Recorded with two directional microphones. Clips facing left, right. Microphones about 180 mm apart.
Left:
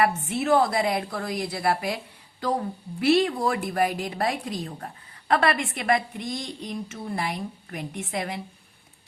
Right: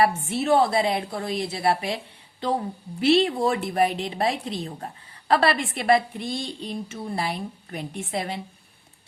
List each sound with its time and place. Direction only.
0.0 s a woman's voice: 30° right (ahead or behind)
3.0 s a woman's voice: 25° right (ahead or behind)